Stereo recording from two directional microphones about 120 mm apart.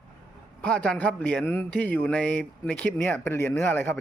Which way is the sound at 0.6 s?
10° left (ahead or behind).